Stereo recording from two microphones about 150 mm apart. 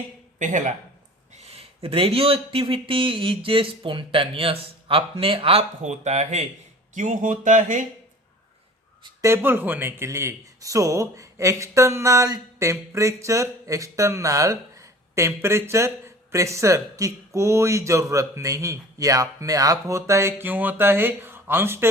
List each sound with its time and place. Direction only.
0.3 s speech: 55° right (ahead or behind)
1.4 s speech: 45° right (ahead or behind)
9.2 s speech: 15° right (ahead or behind)